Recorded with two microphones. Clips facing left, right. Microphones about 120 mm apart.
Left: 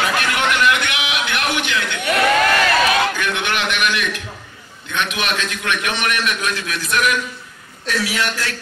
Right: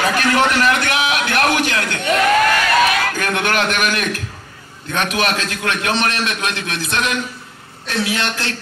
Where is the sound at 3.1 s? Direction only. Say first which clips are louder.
Right 3 dB; 40° right (ahead or behind).